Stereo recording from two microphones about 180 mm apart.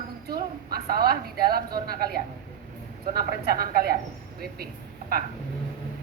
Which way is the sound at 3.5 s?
55° right (ahead or behind).